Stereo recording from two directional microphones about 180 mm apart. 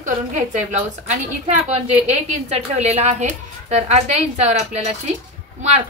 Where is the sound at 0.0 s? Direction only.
45° right (ahead or behind).